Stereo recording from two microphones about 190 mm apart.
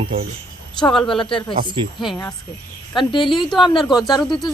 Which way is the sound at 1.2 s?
25° left (ahead or behind).